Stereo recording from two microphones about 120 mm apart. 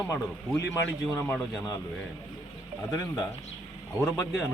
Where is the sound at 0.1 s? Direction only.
25° left (ahead or behind).